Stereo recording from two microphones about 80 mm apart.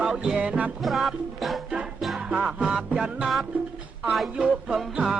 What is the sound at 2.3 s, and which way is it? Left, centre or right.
Music, centre.